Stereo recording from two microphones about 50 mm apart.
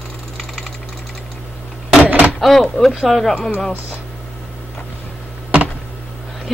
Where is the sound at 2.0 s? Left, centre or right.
Right.